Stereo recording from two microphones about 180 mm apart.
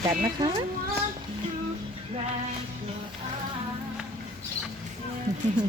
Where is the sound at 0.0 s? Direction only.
25° right (ahead or behind).